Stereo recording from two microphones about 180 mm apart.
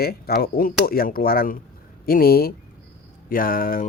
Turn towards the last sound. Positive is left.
turn(degrees=50)  # may be behind; listen again after turning